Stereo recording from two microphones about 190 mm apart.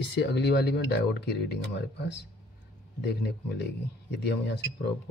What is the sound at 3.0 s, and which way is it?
Speech, 60° left (ahead or behind).